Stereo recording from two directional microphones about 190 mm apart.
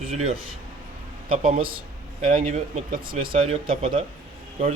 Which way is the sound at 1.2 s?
35° right (ahead or behind).